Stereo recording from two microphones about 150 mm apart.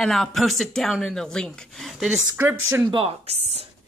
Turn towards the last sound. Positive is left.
turn(degrees=-45)  # may be behind; listen again after turning